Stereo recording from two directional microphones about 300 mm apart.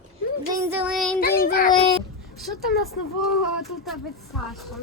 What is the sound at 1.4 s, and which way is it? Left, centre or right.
Speech, left.